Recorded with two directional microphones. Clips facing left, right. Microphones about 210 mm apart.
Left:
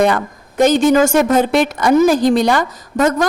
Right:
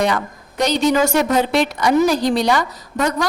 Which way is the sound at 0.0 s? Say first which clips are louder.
Left 5 dB; 50° left (ahead or behind).